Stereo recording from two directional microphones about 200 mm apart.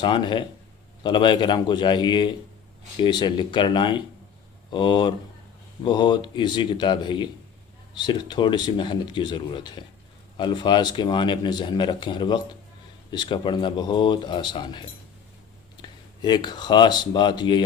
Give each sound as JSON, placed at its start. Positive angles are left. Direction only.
{"t": 0.0, "sound": "speech", "side_deg": 25}